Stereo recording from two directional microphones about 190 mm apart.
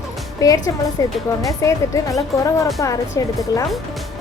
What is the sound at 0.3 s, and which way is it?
A woman's voice, 20° left (ahead or behind).